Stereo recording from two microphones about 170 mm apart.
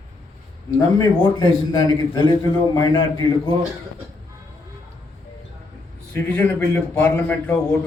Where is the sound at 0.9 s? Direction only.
20° left (ahead or behind).